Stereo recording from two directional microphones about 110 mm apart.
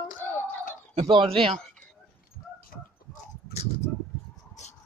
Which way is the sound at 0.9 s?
65° right (ahead or behind).